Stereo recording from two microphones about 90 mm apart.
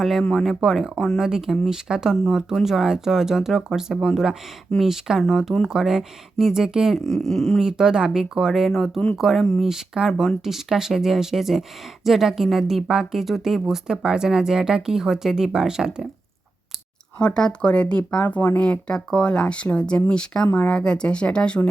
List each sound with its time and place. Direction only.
0.0 s a woman's voice: centre (ahead or behind)
7.6 s a woman's voice: 5° right (ahead or behind)
17.2 s speech: 10° left (ahead or behind)